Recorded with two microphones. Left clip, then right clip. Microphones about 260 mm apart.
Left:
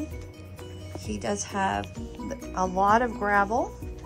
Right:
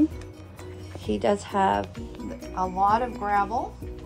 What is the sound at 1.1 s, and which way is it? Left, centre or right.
Speech, centre.